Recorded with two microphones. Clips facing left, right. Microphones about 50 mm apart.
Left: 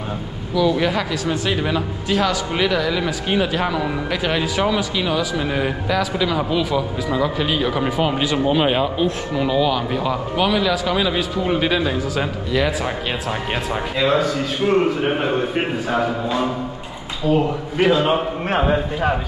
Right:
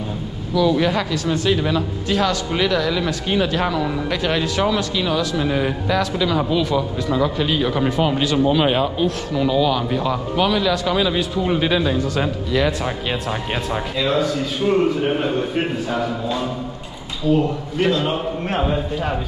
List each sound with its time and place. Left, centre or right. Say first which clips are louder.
0.6 s speech: right 1 dB; centre
13.9 s speech: left 2 dB; centre
15.0 s a man's voice: even; centre